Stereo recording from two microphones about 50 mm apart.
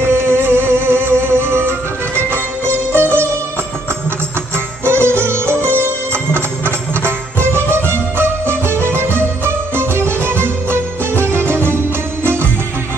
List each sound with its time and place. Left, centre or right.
0.2 s music: right
4.8 s music: right